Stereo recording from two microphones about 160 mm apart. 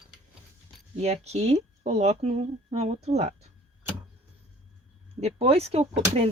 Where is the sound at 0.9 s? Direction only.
45° right (ahead or behind).